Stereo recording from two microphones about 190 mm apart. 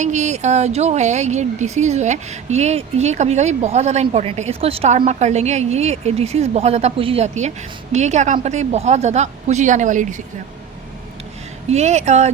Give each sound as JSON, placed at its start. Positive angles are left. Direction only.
{"t": 0.0, "sound": "speech", "side_deg": -40}
{"t": 11.7, "sound": "speech", "side_deg": -35}